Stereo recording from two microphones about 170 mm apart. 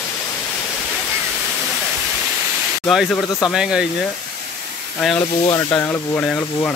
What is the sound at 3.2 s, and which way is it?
Speech, 20° left (ahead or behind).